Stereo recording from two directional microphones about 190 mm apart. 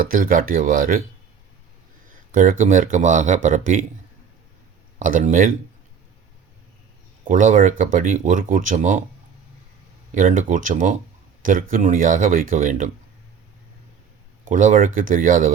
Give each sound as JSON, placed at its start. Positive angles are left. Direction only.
{"t": 0.0, "sound": "speech", "side_deg": -45}
{"t": 2.3, "sound": "speech", "side_deg": -45}
{"t": 4.9, "sound": "speech", "side_deg": -45}
{"t": 7.3, "sound": "speech", "side_deg": -45}
{"t": 10.1, "sound": "speech", "side_deg": -45}
{"t": 14.5, "sound": "speech", "side_deg": -40}